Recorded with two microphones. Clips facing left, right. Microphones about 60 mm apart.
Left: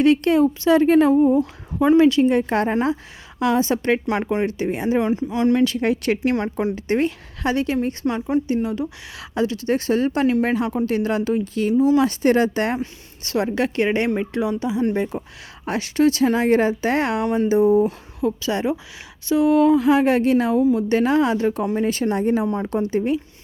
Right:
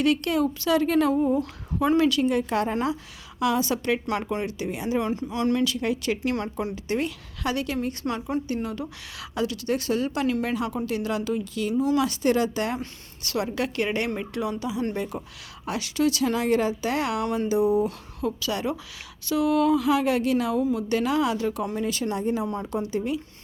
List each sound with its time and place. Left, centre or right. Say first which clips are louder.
0.0 s speech: left 7 dB; left
1.4 s speech: left 6 dB; centre
2.0 s speech: left 7 dB; left
4.9 s a woman's voice: left 4 dB; left
5.6 s speech: left 6 dB; left
6.3 s speech: left 6 dB; left
8.0 s speech: left 6 dB; centre
9.3 s speech: left 5 dB; left
13.2 s a woman's voice: left 6 dB; left
17.8 s a woman's voice: left 6 dB; left
22.2 s speech: left 6 dB; left